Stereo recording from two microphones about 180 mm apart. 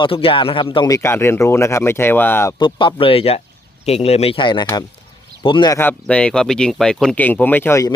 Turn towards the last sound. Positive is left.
turn(degrees=15)  # may be behind; listen again after turning